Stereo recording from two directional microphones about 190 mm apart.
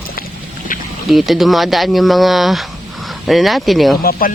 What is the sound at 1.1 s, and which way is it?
Speech, centre (ahead or behind).